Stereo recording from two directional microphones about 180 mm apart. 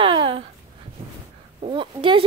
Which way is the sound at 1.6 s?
30° right (ahead or behind).